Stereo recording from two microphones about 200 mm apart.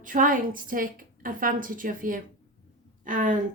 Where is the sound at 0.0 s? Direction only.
40° right (ahead or behind).